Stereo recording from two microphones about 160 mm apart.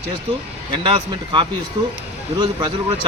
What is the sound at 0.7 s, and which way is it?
Speech, 30° right (ahead or behind).